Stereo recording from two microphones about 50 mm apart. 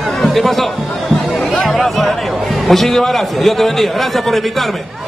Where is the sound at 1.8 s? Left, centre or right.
Centre.